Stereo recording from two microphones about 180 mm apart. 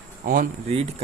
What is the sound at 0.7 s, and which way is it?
Speech, 35° right (ahead or behind).